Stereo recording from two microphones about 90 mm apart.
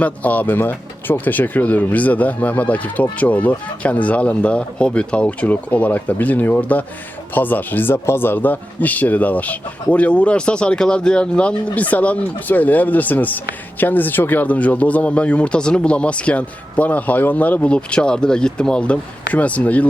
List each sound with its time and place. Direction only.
0.0 s speech: 15° left (ahead or behind)